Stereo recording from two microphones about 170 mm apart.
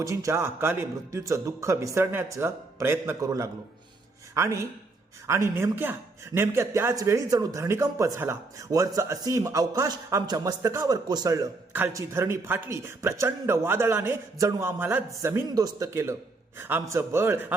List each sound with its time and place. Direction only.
0.0 s speech: 20° right (ahead or behind)